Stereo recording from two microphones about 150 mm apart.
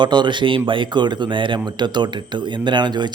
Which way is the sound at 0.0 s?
30° right (ahead or behind).